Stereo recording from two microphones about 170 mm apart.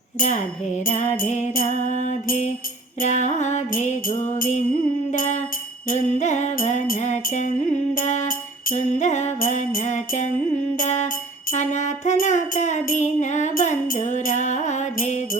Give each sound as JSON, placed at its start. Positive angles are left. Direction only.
{"t": 0.2, "sound": "music", "side_deg": 45}